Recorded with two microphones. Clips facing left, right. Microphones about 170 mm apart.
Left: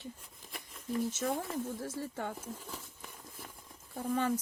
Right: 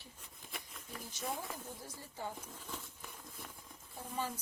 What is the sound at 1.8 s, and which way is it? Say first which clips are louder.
Speech: left 9 dB; 85° left.